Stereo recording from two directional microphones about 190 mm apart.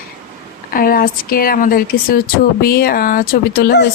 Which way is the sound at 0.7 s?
50° left (ahead or behind).